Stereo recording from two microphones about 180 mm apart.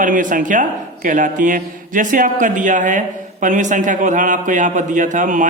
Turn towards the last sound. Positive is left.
turn(degrees=-45)  # may be behind; listen again after turning